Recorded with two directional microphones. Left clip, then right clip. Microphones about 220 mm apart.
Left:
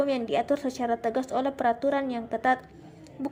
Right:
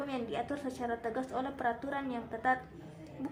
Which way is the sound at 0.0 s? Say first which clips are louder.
Left 11 dB; 30° left (ahead or behind).